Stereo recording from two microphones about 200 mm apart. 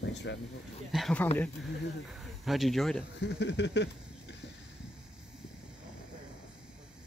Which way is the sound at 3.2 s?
60° left (ahead or behind).